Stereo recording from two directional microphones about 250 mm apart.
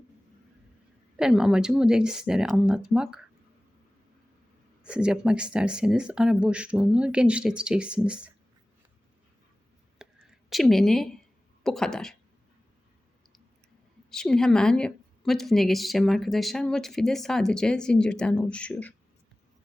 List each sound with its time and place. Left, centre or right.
1.1 s a woman's voice: centre
4.8 s a woman's voice: centre
10.0 s a sound: centre
11.6 s a woman's voice: centre
14.1 s a woman's voice: centre